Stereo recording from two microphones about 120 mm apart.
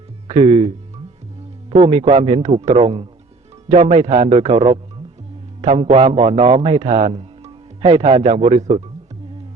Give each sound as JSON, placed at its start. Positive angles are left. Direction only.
{"t": 0.3, "sound": "speech", "side_deg": -55}
{"t": 1.7, "sound": "a man's voice", "side_deg": -60}
{"t": 3.7, "sound": "a man's voice", "side_deg": -65}